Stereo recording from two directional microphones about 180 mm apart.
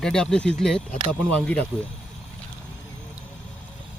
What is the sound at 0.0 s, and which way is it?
Speech, 5° left (ahead or behind).